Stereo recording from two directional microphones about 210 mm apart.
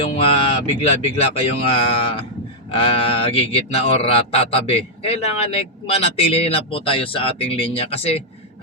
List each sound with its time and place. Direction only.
0.0 s speech: 25° left (ahead or behind)